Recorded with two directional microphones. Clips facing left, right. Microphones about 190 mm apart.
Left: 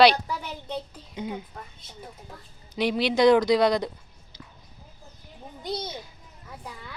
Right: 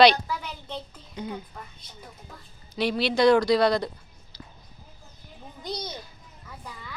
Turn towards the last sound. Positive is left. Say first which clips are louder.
# left 2 dB
turn(degrees=25)  # may be behind; listen again after turning